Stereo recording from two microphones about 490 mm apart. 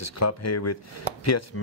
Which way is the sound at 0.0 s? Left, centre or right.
Left.